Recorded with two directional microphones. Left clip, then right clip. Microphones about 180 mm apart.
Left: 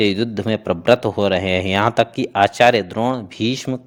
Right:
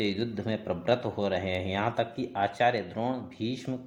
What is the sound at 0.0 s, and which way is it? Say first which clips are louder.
A man's voice: left 12 dB; 50° left (ahead or behind).